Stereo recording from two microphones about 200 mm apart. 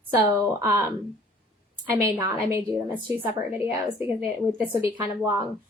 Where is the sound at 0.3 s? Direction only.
10° right (ahead or behind).